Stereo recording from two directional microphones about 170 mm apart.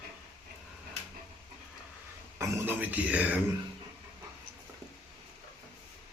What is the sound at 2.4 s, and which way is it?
Speech, 15° right (ahead or behind).